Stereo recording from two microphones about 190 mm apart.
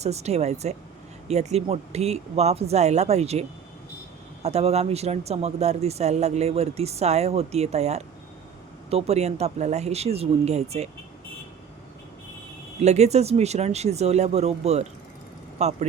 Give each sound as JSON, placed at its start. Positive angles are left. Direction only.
{"t": 0.0, "sound": "speech", "side_deg": -35}
{"t": 4.4, "sound": "speech", "side_deg": -35}
{"t": 12.8, "sound": "speech", "side_deg": -35}